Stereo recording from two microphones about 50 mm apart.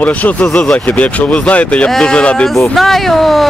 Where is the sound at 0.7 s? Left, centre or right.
Left.